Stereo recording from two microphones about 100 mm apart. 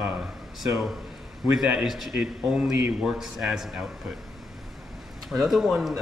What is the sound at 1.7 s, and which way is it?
A man's voice, 5° right (ahead or behind).